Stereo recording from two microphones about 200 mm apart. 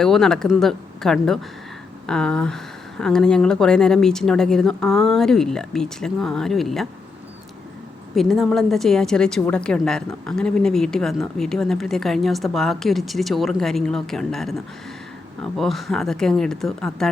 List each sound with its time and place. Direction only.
0.0 s a woman's voice: centre (ahead or behind)
8.1 s a woman's voice: centre (ahead or behind)